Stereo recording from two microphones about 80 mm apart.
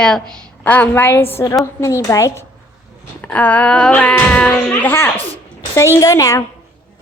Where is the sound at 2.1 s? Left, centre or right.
Left.